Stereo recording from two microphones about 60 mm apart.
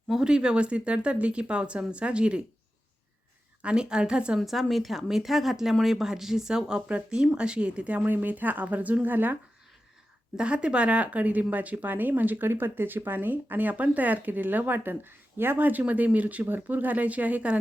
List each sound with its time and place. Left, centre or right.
0.1 s speech: centre
3.6 s speech: centre
4.4 s a woman's voice: centre; by 9.4 s right
10.3 s speech: centre